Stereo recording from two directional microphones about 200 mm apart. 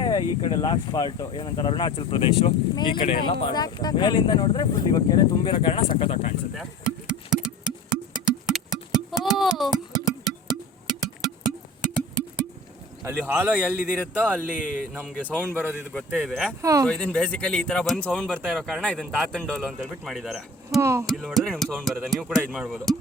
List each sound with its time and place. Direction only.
0.0 s speech: 20° left (ahead or behind)
6.6 s a sound: 5° right (ahead or behind)
13.1 s speech: 10° right (ahead or behind)
15.2 s speech: 10° left (ahead or behind)
16.6 s speech: 15° right (ahead or behind)
16.8 s speech: 5° left (ahead or behind)
20.8 s speech: 15° right (ahead or behind)
21.1 s speech: centre (ahead or behind)